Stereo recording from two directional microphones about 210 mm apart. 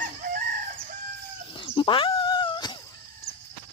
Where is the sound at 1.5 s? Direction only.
25° left (ahead or behind).